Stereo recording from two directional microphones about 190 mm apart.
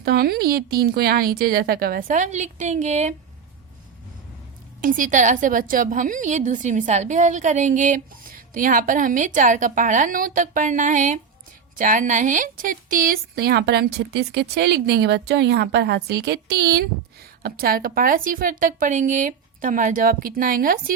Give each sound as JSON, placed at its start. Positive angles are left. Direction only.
{"t": 0.0, "sound": "a woman's voice", "side_deg": -55}
{"t": 4.8, "sound": "a woman's voice", "side_deg": -45}